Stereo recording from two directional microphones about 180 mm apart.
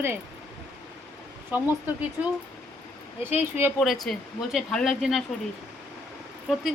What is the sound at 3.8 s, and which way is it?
A woman's voice, centre (ahead or behind).